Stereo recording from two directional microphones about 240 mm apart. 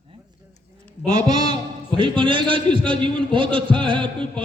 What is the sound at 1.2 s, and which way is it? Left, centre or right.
A man's voice, centre.